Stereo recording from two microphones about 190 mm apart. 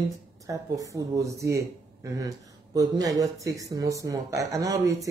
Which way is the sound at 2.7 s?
20° right (ahead or behind).